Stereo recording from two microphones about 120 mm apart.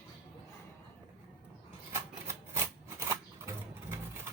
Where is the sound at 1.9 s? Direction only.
20° right (ahead or behind).